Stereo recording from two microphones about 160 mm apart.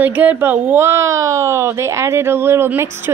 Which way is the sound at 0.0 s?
10° right (ahead or behind).